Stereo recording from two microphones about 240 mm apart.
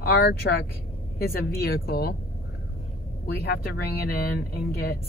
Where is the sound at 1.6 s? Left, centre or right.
Left.